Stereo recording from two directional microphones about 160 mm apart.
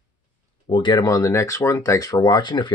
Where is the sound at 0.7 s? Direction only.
30° left (ahead or behind).